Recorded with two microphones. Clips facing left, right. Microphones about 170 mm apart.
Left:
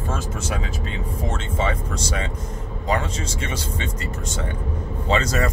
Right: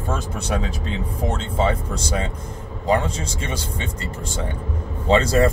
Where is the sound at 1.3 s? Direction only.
30° right (ahead or behind).